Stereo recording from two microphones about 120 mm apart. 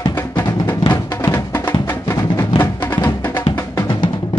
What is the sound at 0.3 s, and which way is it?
Music, 35° left (ahead or behind).